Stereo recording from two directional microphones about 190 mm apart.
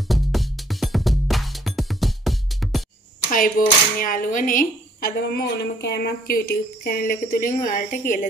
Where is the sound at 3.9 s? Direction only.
45° left (ahead or behind).